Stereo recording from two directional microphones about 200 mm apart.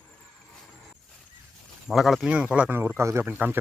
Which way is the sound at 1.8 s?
Centre (ahead or behind).